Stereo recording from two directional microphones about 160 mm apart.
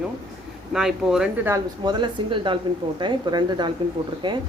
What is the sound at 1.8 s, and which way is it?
A woman's voice, 30° right (ahead or behind).